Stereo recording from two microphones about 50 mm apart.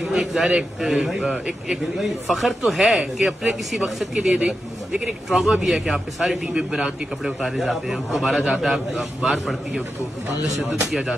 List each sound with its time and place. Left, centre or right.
0.1 s a man's voice: centre
1.2 s speech: right
2.0 s speech: centre
4.1 s speech: right
5.4 s a man's voice: centre